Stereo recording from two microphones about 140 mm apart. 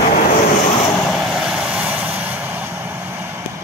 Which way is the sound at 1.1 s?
Centre (ahead or behind).